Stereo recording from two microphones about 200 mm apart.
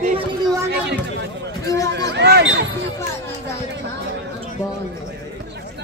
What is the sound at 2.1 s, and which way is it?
Speech, 60° right (ahead or behind).